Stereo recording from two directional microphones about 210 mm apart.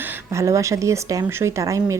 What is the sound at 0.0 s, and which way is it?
Speech, 10° right (ahead or behind).